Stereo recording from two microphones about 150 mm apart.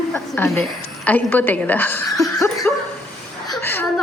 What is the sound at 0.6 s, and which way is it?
A woman's voice, 5° left (ahead or behind).